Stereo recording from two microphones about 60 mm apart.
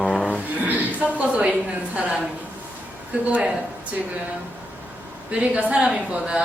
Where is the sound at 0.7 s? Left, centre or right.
Right.